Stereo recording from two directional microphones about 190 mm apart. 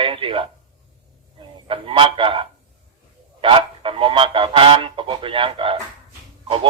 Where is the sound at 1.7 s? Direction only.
25° right (ahead or behind).